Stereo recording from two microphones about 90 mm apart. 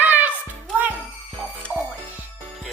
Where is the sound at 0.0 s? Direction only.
20° right (ahead or behind).